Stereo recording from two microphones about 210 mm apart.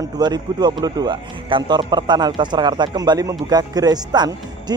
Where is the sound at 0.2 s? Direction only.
20° right (ahead or behind).